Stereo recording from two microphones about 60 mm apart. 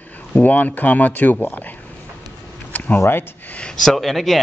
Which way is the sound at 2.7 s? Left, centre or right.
Left.